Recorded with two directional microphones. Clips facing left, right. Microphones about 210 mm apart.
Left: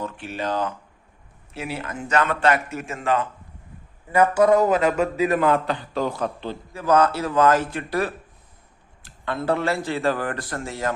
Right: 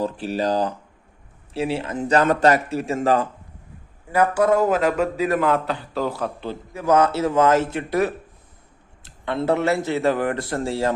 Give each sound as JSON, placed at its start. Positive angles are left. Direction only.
{"t": 0.0, "sound": "speech", "side_deg": -35}
{"t": 4.1, "sound": "a man's voice", "side_deg": -5}